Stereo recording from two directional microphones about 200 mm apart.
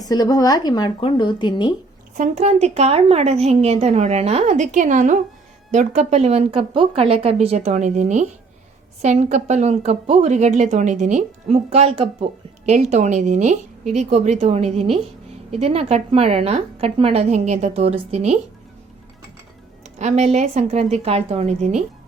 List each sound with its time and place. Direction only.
0.0 s a woman's voice: 20° left (ahead or behind)
2.1 s a woman's voice: 35° right (ahead or behind)
20.0 s a woman's voice: 35° right (ahead or behind)